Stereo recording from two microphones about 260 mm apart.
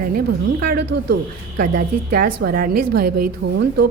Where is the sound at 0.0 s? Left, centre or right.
Right.